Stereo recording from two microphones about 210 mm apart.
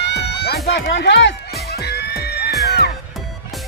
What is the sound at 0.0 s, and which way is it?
Music, 55° left (ahead or behind).